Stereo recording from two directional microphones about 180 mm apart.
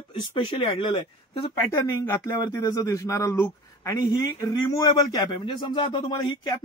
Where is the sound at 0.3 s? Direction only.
25° left (ahead or behind).